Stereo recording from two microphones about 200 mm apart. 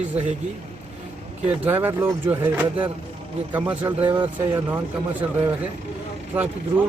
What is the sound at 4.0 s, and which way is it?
Speech, 25° right (ahead or behind).